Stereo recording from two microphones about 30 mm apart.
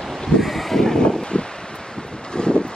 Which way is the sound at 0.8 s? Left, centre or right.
Left.